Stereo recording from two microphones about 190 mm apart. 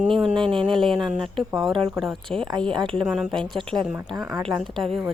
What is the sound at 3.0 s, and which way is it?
Speech, centre (ahead or behind).